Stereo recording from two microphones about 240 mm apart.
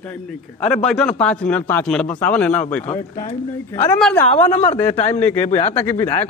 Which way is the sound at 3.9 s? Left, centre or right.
Centre.